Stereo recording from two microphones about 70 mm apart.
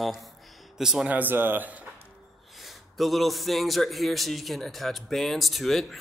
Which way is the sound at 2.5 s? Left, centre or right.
Centre.